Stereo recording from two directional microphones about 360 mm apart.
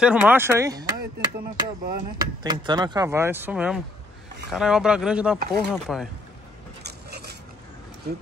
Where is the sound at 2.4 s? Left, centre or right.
Centre.